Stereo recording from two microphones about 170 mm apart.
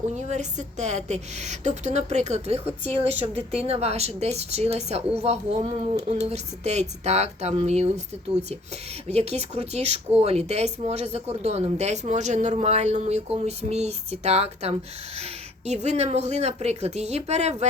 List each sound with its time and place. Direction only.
0.2 s a woman's voice: 45° right (ahead or behind)
9.0 s speech: 40° right (ahead or behind)